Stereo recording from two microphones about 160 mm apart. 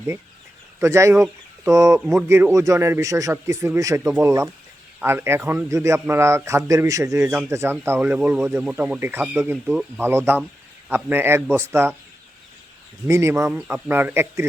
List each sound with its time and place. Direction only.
0.8 s a man's voice: 20° right (ahead or behind)
13.1 s speech: 20° right (ahead or behind)
13.5 s a man's voice: 5° right (ahead or behind)